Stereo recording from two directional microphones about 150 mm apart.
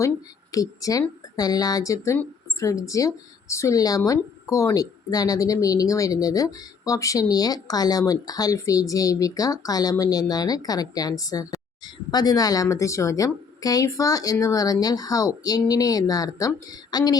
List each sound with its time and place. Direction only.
0.5 s speech: 25° left (ahead or behind)